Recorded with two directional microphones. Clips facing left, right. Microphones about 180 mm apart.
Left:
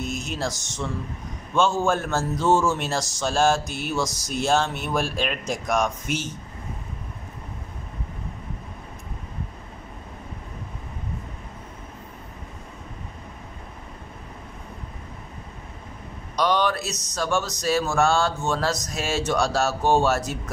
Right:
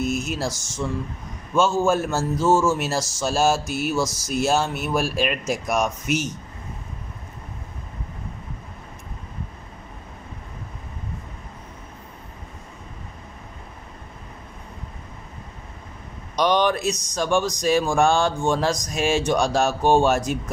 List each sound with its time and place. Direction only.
0.2 s a man's voice: 5° right (ahead or behind)
16.3 s a sound: 20° right (ahead or behind)
17.1 s a man's voice: 15° right (ahead or behind)